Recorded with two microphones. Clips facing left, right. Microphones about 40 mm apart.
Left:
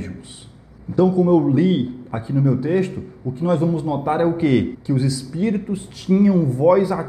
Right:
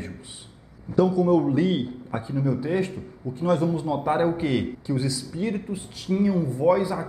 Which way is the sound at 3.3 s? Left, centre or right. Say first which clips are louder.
Left 3 dB; left.